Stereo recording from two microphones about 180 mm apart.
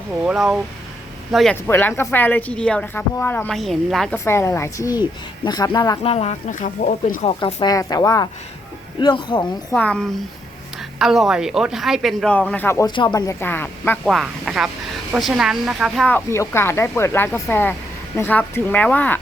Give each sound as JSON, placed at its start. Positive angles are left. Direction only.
{"t": 0.3, "sound": "speech", "side_deg": -5}
{"t": 1.6, "sound": "speech", "side_deg": 10}
{"t": 4.2, "sound": "speech", "side_deg": 15}
{"t": 6.0, "sound": "speech", "side_deg": 35}
{"t": 7.3, "sound": "speech", "side_deg": 25}
{"t": 9.7, "sound": "speech", "side_deg": 5}
{"t": 12.9, "sound": "speech", "side_deg": 25}
{"t": 16.0, "sound": "speech", "side_deg": 10}